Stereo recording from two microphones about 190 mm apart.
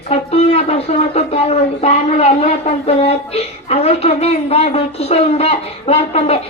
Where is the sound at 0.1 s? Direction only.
35° left (ahead or behind).